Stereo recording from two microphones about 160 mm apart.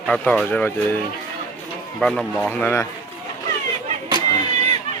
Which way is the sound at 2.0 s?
5° left (ahead or behind).